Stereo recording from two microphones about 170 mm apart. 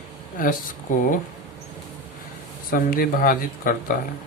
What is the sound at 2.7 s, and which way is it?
Speech, 60° left (ahead or behind).